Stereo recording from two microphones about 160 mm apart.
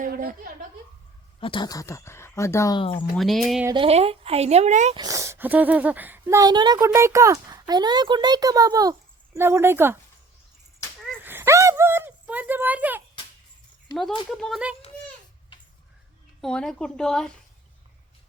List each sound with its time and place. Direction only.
0.0 s a woman's voice: 65° right (ahead or behind)
1.4 s speech: 30° left (ahead or behind)
3.2 s speech: centre (ahead or behind)
3.8 s a woman's voice: 40° right (ahead or behind)
4.9 s speech: 20° right (ahead or behind)
11.2 s a sound: 15° right (ahead or behind)
14.3 s speech: 5° left (ahead or behind)
16.4 s speech: 5° left (ahead or behind)